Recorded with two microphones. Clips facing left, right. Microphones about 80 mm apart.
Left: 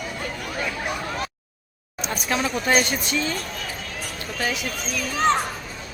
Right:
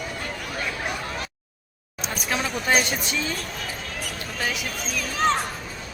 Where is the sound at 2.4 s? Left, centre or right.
Centre.